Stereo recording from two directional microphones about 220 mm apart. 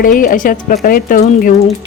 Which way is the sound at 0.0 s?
40° left (ahead or behind).